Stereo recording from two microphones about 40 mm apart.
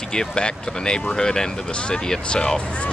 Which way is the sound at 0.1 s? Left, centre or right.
Left.